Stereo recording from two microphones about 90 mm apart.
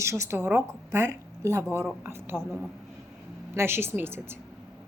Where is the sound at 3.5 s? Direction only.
25° right (ahead or behind).